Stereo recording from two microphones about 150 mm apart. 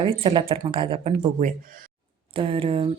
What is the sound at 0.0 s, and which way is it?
Speech, 35° right (ahead or behind).